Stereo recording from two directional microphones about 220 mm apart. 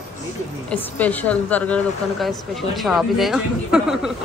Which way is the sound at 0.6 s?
5° left (ahead or behind).